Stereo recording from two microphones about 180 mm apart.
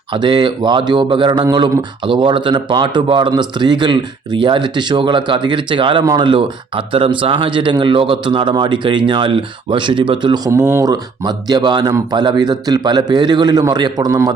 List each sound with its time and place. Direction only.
0.1 s speech: 25° right (ahead or behind)